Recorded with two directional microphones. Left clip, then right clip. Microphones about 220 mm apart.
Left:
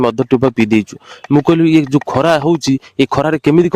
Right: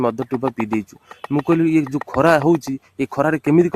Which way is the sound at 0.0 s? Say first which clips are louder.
Left 6 dB; 30° left (ahead or behind).